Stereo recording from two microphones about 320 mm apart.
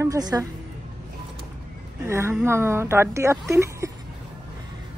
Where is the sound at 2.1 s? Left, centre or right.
Centre.